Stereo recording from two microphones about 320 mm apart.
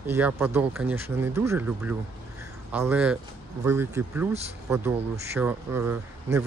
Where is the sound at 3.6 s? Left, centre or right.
Centre.